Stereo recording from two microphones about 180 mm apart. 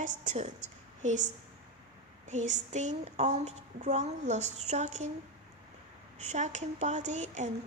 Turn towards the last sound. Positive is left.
turn(degrees=-40)  # may be behind; listen again after turning